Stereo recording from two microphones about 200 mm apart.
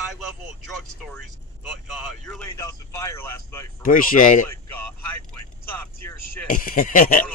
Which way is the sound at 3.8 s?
45° left (ahead or behind).